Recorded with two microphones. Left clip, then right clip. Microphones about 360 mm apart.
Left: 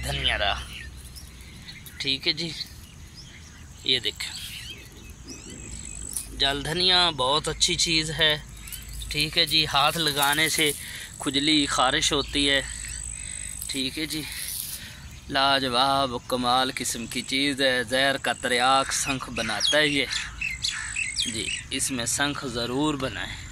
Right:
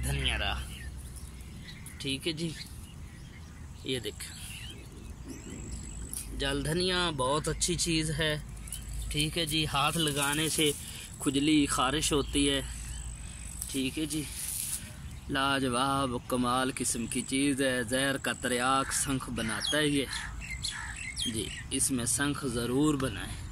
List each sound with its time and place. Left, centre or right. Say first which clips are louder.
0.1 s a sound: left 8 dB; centre
2.0 s speech: left 9 dB; centre
3.8 s speech: left 11 dB; centre
6.3 s speech: left 7 dB; centre
13.8 s speech: left 3 dB; centre
15.3 s speech: left 7 dB; centre
20.6 s bird: left 6 dB; right
21.3 s speech: left 7 dB; centre